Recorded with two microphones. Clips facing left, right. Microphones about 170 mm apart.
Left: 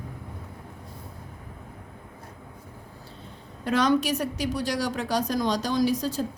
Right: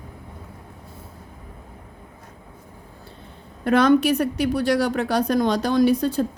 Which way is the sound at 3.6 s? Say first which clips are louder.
Right 6 dB; 55° right (ahead or behind).